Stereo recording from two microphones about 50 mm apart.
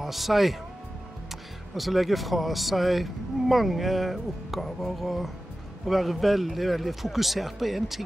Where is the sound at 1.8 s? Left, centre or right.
Centre.